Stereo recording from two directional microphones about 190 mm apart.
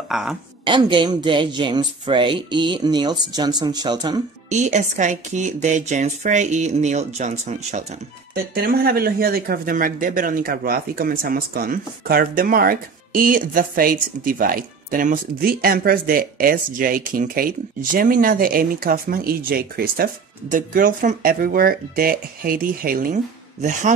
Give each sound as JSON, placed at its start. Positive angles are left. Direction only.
{"t": 0.1, "sound": "a woman's voice", "side_deg": 0}
{"t": 0.7, "sound": "speech", "side_deg": -25}
{"t": 4.5, "sound": "speech", "side_deg": -40}
{"t": 8.5, "sound": "a man's voice", "side_deg": -55}